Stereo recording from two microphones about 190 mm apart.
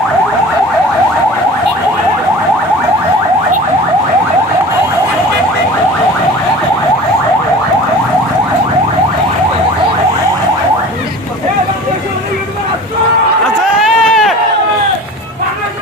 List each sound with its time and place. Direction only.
13.8 s run: centre (ahead or behind)